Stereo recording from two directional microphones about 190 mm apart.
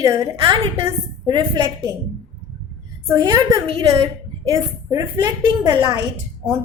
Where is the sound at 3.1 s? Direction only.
20° right (ahead or behind).